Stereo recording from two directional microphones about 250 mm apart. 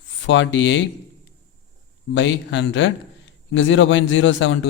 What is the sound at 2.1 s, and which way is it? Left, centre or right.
A man's voice, left.